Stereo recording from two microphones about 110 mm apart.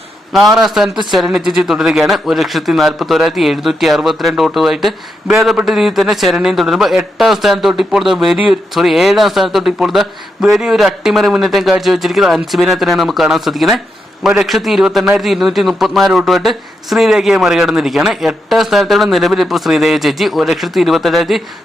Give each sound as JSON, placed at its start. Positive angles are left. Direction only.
{"t": 0.3, "sound": "a man's voice", "side_deg": 0}